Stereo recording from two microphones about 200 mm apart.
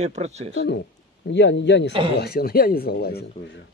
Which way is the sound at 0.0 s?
35° right (ahead or behind).